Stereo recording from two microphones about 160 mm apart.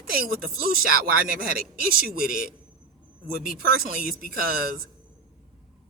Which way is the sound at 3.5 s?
65° right (ahead or behind).